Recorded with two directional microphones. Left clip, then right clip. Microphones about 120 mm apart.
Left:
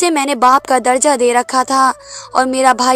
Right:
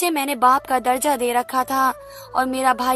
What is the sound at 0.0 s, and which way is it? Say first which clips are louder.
Speech: left 6 dB; 45° left (ahead or behind).